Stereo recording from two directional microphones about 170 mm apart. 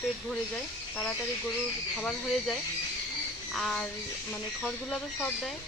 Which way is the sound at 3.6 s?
5° left (ahead or behind).